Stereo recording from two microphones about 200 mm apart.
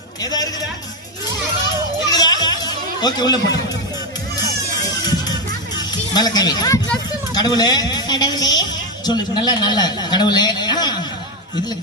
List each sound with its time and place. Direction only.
0.2 s a man's voice: 20° left (ahead or behind)
2.0 s a sound: 20° left (ahead or behind)
5.7 s music: 20° left (ahead or behind)
7.3 s a man's voice: 20° left (ahead or behind)